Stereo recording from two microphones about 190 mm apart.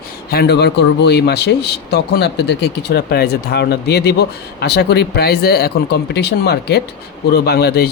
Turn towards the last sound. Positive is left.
turn(degrees=55)  # may be behind; listen again after turning